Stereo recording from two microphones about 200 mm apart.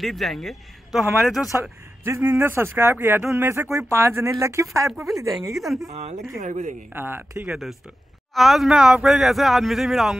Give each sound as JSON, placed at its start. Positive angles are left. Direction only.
{"t": 0.0, "sound": "speech", "side_deg": 0}
{"t": 1.6, "sound": "speech", "side_deg": -15}
{"t": 5.6, "sound": "speech", "side_deg": 0}
{"t": 6.3, "sound": "speech", "side_deg": -35}
{"t": 6.9, "sound": "speech", "side_deg": -10}